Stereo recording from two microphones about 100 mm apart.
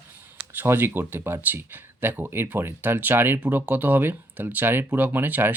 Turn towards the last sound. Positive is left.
turn(degrees=-20)  # may be behind; listen again after turning